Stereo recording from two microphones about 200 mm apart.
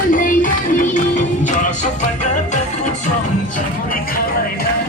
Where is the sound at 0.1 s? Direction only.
40° left (ahead or behind).